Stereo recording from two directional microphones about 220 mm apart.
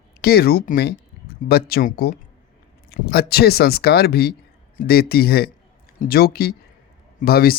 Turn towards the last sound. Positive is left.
turn(degrees=45)  # may be behind; listen again after turning